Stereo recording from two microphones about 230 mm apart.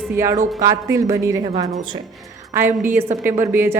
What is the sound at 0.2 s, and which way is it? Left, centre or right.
A woman's voice, centre.